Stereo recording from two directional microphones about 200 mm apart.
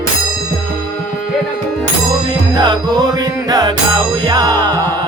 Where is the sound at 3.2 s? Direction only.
20° right (ahead or behind).